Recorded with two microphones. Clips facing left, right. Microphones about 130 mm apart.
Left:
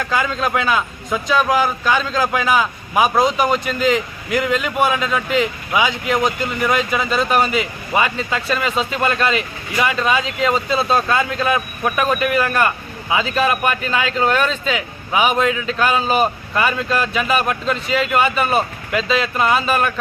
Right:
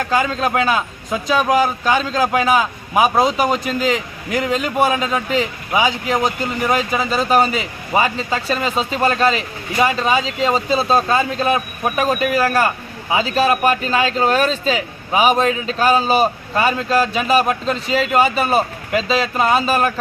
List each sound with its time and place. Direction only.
0.0 s speech: 35° right (ahead or behind)